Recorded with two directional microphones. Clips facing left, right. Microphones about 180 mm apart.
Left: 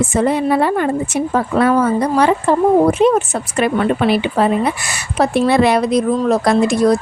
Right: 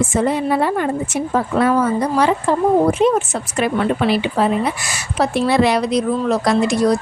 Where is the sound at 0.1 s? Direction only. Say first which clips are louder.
Left 3 dB; 60° left (ahead or behind).